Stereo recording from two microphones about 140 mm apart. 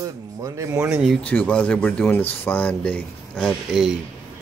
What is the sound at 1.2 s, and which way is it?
Speech, 10° left (ahead or behind).